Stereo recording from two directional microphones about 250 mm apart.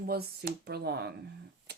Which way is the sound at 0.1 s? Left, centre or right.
Right.